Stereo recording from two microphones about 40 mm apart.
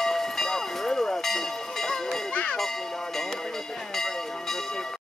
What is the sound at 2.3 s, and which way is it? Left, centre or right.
Music, left.